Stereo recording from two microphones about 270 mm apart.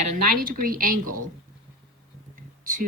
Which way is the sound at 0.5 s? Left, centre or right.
Right.